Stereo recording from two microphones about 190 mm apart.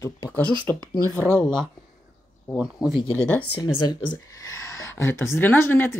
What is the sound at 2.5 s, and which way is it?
Speech, 5° right (ahead or behind).